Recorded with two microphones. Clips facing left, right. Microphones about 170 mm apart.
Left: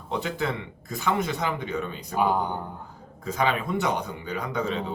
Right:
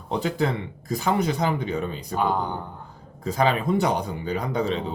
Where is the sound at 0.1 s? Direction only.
35° right (ahead or behind).